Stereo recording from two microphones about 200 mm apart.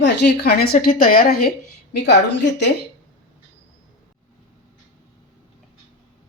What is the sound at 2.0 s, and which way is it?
Speech, 60° left (ahead or behind).